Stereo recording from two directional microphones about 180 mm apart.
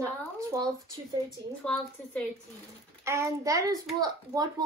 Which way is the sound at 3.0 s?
15° right (ahead or behind).